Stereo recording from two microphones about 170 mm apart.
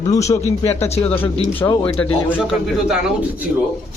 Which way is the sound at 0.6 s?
40° left (ahead or behind).